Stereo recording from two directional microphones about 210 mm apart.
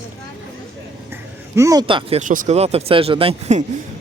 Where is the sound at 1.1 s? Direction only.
15° right (ahead or behind).